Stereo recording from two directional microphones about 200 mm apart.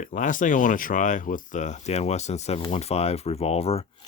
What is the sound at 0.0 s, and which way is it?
Speech, 40° left (ahead or behind).